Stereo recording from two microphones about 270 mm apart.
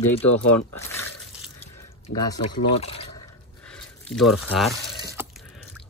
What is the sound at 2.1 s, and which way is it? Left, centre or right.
Speech, left.